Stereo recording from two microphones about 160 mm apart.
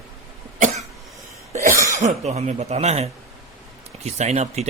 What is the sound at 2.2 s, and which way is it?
Speech, 40° right (ahead or behind).